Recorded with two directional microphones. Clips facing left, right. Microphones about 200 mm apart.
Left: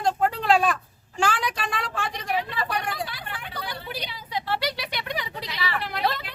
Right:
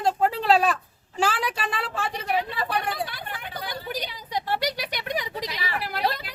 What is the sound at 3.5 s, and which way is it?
A woman's voice, 45° right (ahead or behind).